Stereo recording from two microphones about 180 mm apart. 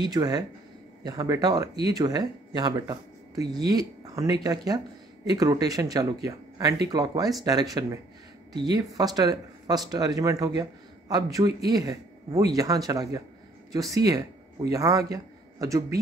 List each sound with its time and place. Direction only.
0.0 s a man's voice: 20° right (ahead or behind)